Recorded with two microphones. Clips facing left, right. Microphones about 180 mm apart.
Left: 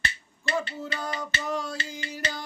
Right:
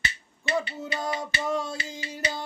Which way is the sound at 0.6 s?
20° right (ahead or behind).